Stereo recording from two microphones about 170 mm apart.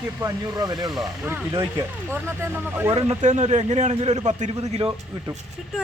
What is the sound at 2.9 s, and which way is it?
A man's voice, 40° right (ahead or behind).